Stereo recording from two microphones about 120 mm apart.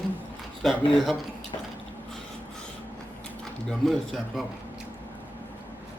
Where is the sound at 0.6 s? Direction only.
Centre (ahead or behind).